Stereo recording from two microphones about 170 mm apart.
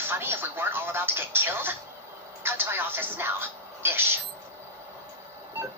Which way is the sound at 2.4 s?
15° right (ahead or behind).